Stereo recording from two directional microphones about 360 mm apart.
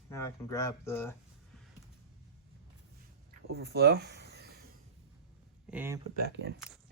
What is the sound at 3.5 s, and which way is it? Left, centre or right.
Speech, right.